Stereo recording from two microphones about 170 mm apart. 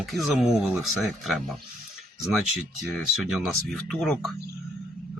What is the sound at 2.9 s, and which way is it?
Speech, centre (ahead or behind).